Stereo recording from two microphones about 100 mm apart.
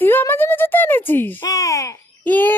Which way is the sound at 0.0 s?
20° left (ahead or behind).